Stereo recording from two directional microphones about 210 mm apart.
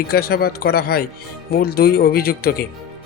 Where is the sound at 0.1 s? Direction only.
45° left (ahead or behind).